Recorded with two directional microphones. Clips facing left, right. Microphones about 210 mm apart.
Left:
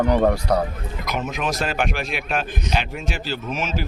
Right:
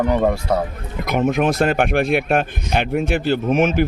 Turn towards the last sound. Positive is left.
turn(degrees=-55)  # may be behind; listen again after turning